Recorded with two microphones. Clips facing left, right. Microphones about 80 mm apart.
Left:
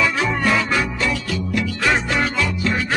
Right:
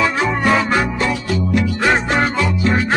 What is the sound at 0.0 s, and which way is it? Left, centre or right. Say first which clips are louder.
Music: right 3 dB; right.